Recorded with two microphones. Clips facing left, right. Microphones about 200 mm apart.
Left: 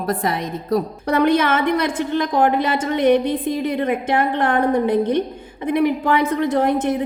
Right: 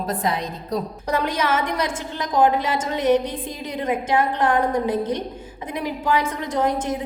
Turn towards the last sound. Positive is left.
turn(degrees=60)  # may be behind; listen again after turning